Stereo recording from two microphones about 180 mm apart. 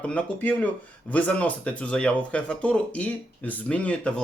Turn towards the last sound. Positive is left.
turn(degrees=5)  # may be behind; listen again after turning